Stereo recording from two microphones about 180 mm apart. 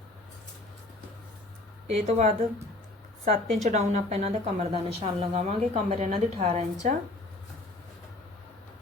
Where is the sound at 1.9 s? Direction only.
35° right (ahead or behind).